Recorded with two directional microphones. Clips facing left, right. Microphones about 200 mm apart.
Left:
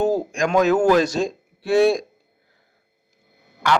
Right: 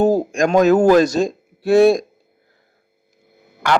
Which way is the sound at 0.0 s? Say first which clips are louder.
Right 5 dB; 40° right (ahead or behind).